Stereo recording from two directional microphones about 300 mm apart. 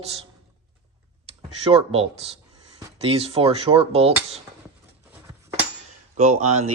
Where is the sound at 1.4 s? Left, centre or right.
Centre.